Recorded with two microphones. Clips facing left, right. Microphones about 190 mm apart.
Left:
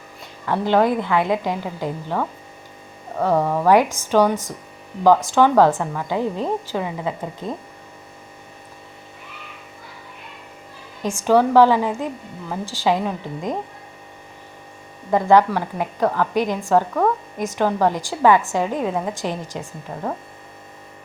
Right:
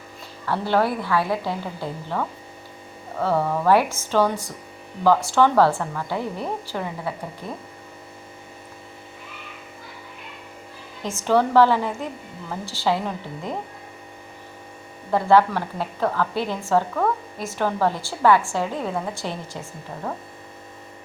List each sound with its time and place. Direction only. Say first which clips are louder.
0.4 s a woman's voice: left 4 dB; 15° left (ahead or behind)
11.0 s a woman's voice: left 4 dB; 15° left (ahead or behind)
15.1 s a woman's voice: left 2 dB; 15° left (ahead or behind)